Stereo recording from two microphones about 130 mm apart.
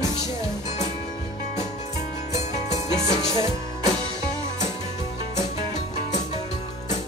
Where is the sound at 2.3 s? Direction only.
60° left (ahead or behind).